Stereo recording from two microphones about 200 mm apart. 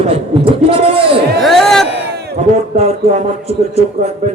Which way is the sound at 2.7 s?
30° right (ahead or behind).